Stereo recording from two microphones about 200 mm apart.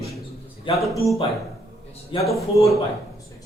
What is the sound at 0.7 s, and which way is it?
Speech, 25° left (ahead or behind).